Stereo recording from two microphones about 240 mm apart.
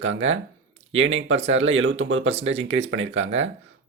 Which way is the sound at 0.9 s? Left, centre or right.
Right.